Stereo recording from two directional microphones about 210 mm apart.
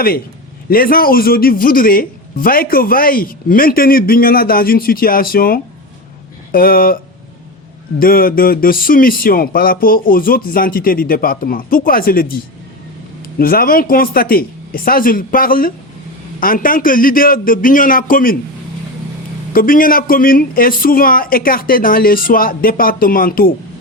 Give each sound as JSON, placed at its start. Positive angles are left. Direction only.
{"t": 0.7, "sound": "speech", "side_deg": 45}
{"t": 13.4, "sound": "a man's voice", "side_deg": 45}
{"t": 19.5, "sound": "speech", "side_deg": 40}